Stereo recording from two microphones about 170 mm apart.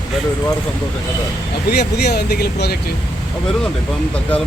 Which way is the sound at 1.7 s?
70° left (ahead or behind).